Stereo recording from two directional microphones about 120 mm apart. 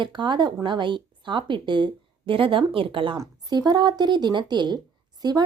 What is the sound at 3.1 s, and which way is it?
A woman's voice, 35° right (ahead or behind).